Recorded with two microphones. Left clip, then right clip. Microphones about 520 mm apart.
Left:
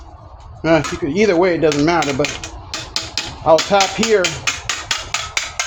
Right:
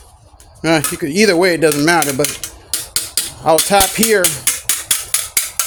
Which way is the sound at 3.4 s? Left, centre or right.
Right.